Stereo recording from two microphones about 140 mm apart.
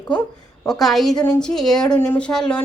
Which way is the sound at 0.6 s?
Centre (ahead or behind).